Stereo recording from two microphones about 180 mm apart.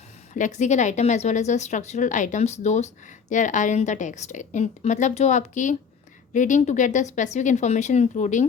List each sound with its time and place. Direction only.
0.3 s a woman's voice: 45° left (ahead or behind)